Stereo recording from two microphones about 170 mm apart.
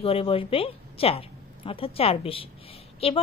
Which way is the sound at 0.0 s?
35° left (ahead or behind).